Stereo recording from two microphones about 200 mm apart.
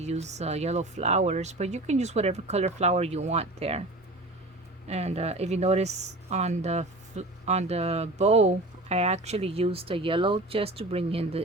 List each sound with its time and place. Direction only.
0.0 s speech: 35° right (ahead or behind)
4.9 s speech: 30° right (ahead or behind)